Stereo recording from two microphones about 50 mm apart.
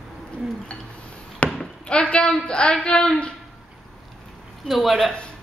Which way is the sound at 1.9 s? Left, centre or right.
Left.